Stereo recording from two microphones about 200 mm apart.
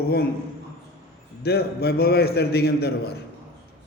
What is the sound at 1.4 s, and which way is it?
A man's voice, 50° left (ahead or behind).